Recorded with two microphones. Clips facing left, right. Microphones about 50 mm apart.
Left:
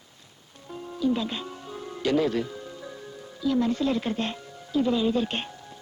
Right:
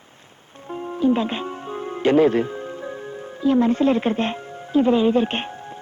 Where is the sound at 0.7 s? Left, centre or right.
Right.